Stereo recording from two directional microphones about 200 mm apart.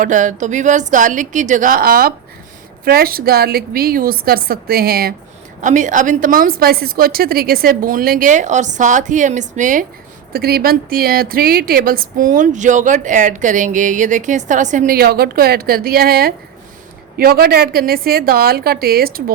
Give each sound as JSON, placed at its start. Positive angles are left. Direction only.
{"t": 0.0, "sound": "a woman's voice", "side_deg": -40}
{"t": 5.6, "sound": "a woman's voice", "side_deg": -40}
{"t": 10.3, "sound": "speech", "side_deg": -50}